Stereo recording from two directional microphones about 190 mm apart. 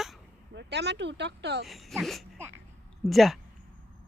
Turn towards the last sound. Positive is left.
turn(degrees=0)  # may be behind; listen again after turning